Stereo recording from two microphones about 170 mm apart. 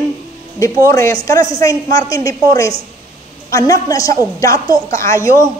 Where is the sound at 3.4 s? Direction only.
20° left (ahead or behind).